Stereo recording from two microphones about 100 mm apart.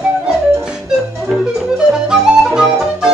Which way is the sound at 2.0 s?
5° right (ahead or behind).